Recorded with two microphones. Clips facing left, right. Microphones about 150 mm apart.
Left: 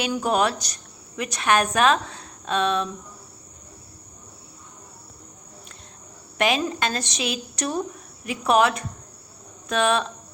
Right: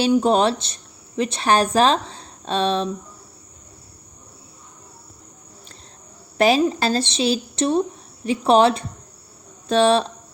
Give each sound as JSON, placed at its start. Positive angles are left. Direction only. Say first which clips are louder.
{"t": 0.0, "sound": "speech", "louder": "right 6 dB", "side_deg": -30}
{"t": 6.3, "sound": "a woman's voice", "louder": "right 6 dB", "side_deg": -35}